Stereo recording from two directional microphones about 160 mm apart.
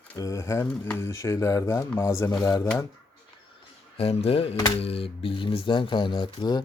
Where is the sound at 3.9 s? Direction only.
35° left (ahead or behind).